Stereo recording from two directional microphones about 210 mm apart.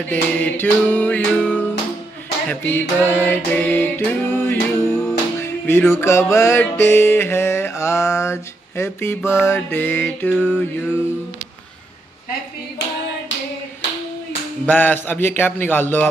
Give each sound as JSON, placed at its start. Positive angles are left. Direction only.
{"t": 0.0, "sound": "music", "side_deg": 5}
{"t": 14.7, "sound": "music", "side_deg": 10}